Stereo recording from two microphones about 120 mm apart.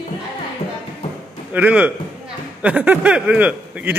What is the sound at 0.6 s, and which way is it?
Music, 55° left (ahead or behind).